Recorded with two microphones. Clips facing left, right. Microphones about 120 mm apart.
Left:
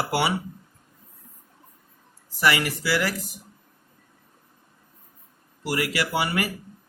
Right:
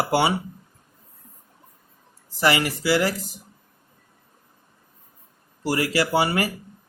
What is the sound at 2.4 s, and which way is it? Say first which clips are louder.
Speech: right 2 dB; 25° right (ahead or behind).